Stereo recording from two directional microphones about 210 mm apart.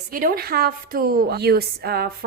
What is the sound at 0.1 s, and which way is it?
A woman's voice, 45° right (ahead or behind).